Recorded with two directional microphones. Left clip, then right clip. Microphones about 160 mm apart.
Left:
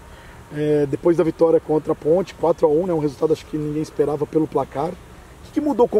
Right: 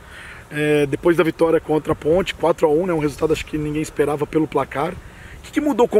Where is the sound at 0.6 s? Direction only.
30° right (ahead or behind).